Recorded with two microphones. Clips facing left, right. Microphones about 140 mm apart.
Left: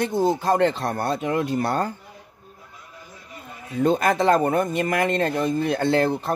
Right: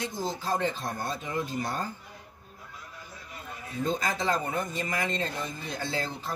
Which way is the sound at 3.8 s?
65° left (ahead or behind).